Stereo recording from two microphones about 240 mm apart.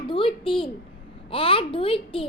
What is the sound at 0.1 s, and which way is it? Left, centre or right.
A woman's voice, left.